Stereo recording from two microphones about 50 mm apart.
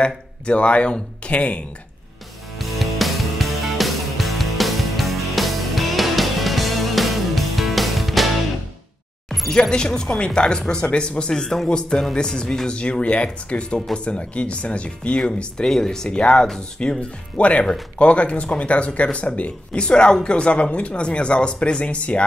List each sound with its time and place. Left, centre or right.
0.0 s speech: left
2.6 s music: centre
9.5 s speech: centre